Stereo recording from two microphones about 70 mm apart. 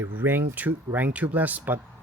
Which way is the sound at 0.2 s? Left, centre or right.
Right.